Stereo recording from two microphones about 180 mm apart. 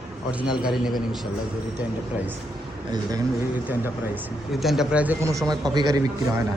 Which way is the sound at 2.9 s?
20° right (ahead or behind).